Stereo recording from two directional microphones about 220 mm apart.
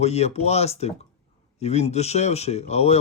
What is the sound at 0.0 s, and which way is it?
Speech, 30° left (ahead or behind).